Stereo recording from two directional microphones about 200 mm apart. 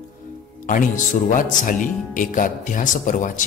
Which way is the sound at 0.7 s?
40° left (ahead or behind).